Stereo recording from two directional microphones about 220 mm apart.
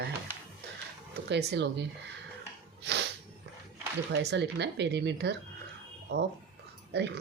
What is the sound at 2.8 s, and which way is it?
Snort, 50° right (ahead or behind).